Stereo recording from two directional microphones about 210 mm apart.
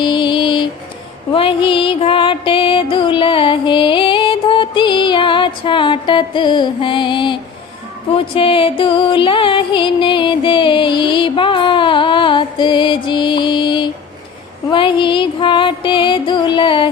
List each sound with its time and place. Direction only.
0.0 s music: 25° left (ahead or behind)